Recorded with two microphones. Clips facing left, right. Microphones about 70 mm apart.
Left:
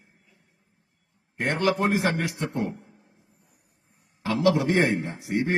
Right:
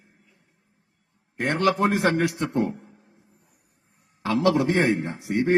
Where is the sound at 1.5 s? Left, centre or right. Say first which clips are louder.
Right 2 dB; right.